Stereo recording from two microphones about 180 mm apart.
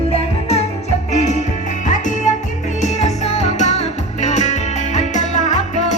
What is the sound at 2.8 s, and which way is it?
Music, 40° left (ahead or behind).